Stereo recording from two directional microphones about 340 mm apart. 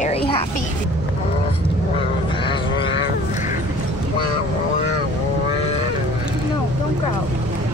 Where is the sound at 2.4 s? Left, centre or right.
Centre.